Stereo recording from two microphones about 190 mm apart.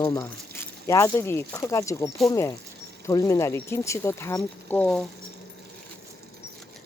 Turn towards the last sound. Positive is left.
turn(degrees=5)  # may be behind; listen again after turning